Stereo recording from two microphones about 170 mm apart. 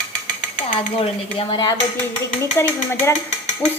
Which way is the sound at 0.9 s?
35° left (ahead or behind).